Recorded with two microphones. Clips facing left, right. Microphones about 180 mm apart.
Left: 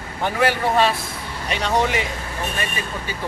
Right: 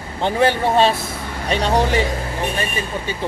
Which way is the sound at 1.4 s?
35° right (ahead or behind).